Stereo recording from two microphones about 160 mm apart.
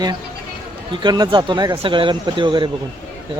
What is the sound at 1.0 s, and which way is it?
Speech, 25° right (ahead or behind).